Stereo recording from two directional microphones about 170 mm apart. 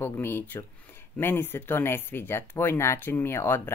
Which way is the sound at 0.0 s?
15° left (ahead or behind).